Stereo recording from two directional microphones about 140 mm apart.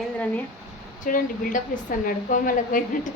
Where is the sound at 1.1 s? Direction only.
75° left (ahead or behind).